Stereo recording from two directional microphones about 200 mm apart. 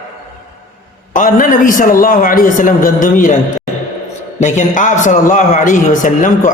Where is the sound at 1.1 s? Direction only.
40° left (ahead or behind).